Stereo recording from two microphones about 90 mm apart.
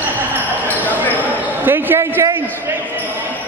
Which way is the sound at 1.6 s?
25° right (ahead or behind).